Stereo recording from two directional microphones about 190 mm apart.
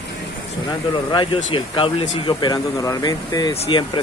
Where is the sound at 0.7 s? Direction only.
25° left (ahead or behind).